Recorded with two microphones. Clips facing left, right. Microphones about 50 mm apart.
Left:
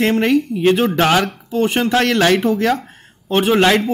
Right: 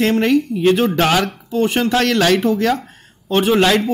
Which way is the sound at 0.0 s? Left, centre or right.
Centre.